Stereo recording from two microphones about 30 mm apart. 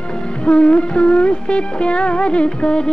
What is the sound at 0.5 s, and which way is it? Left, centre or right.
Music, left.